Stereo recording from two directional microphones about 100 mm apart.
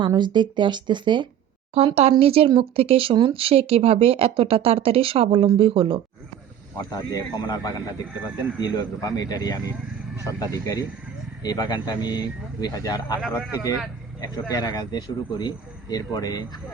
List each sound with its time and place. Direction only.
0.2 s speech: 50° right (ahead or behind)
2.0 s speech: 80° right; by 6.0 s 60° right (ahead or behind)
6.9 s speech: 40° left (ahead or behind)